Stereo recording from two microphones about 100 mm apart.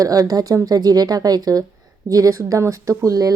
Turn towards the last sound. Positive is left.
turn(degrees=-35)  # may be behind; listen again after turning